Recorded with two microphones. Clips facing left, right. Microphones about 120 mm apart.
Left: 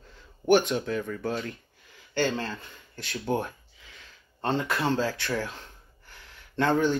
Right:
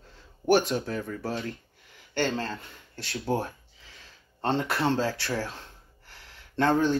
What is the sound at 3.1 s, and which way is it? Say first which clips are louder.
Speech: even; 35° right (ahead or behind).